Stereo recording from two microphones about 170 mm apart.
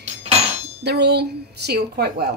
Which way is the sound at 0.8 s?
75° right (ahead or behind).